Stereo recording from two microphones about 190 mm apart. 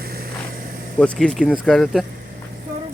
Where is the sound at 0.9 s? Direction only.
5° left (ahead or behind).